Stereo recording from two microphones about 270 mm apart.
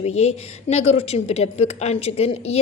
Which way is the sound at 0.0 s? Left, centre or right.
Left.